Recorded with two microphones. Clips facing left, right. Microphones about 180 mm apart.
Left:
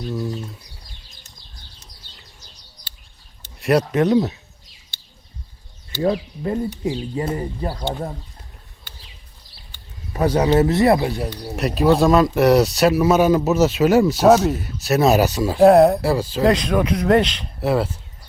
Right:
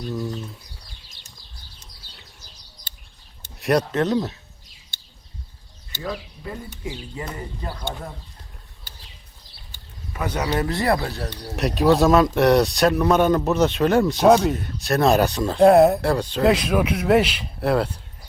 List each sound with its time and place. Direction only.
0.1 s speech: centre (ahead or behind)
3.6 s speech: 5° left (ahead or behind)
6.0 s speech: 40° left (ahead or behind)
7.2 s speech: 30° left (ahead or behind)
10.1 s speech: 30° left (ahead or behind)
11.1 s speech: 5° left (ahead or behind)